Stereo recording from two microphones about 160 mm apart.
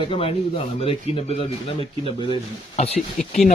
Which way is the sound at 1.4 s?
35° left (ahead or behind).